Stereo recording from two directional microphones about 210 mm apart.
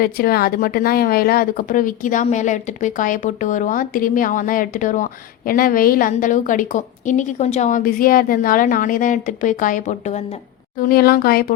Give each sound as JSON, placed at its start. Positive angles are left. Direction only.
{"t": 0.0, "sound": "speech", "side_deg": 45}
{"t": 10.8, "sound": "speech", "side_deg": 45}